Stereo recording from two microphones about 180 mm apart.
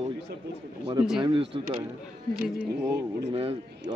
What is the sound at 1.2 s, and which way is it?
Speech, 30° right (ahead or behind).